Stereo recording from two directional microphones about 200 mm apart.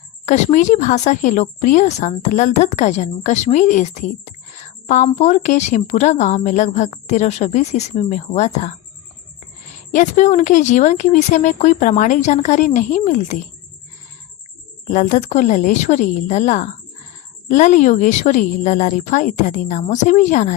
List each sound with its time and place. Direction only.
0.3 s a woman's voice: 35° left (ahead or behind)
9.9 s a woman's voice: 35° left (ahead or behind)
14.8 s a woman's voice: 35° left (ahead or behind)